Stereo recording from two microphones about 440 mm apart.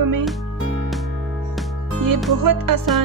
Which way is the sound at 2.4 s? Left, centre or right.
Right.